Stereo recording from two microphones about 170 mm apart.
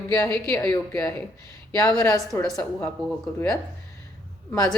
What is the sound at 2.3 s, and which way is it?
Speech, 15° left (ahead or behind).